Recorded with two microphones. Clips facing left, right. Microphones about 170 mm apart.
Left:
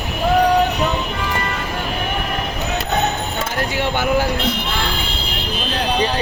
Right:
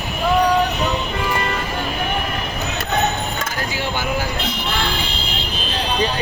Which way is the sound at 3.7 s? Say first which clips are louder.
Left 3 dB; 65° left (ahead or behind).